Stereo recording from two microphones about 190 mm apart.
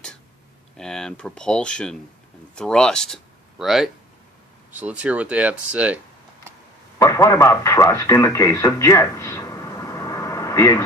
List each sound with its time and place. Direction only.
0.7 s speech: 5° left (ahead or behind)
7.0 s radio: 15° left (ahead or behind)